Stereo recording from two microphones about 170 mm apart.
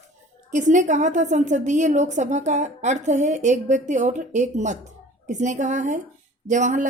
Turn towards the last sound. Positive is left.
turn(degrees=-45)  # may be behind; listen again after turning